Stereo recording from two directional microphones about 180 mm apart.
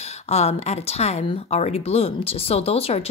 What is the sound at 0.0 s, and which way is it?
Speech, 35° left (ahead or behind).